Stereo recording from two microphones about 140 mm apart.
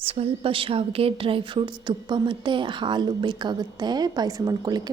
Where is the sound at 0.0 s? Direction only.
40° right (ahead or behind).